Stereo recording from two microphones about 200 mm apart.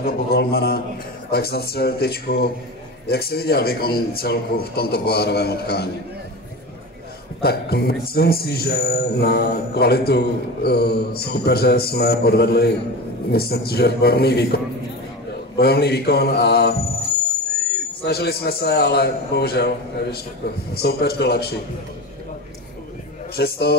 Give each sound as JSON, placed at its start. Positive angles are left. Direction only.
{"t": 0.0, "sound": "speech", "side_deg": 50}
{"t": 7.4, "sound": "speech", "side_deg": 50}
{"t": 18.0, "sound": "speech", "side_deg": 55}
{"t": 23.3, "sound": "speech", "side_deg": 55}